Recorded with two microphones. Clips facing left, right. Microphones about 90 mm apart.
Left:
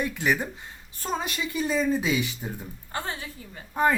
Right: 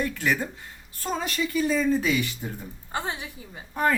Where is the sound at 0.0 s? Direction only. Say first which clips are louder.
Even; 15° left (ahead or behind).